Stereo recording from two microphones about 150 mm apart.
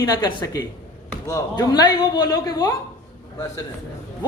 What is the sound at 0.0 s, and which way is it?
A woman's voice, 25° left (ahead or behind).